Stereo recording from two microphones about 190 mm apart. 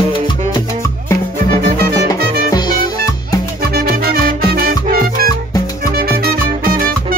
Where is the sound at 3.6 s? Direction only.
55° right (ahead or behind).